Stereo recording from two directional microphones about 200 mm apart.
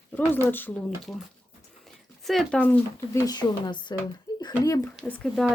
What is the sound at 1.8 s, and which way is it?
Speech, centre (ahead or behind).